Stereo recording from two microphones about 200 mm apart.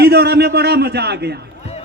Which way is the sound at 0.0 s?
55° right (ahead or behind).